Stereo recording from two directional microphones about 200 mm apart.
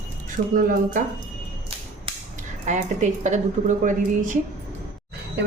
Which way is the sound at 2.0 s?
35° right (ahead or behind).